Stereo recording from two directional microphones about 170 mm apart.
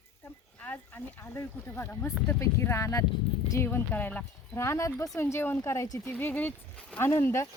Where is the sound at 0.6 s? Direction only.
10° left (ahead or behind).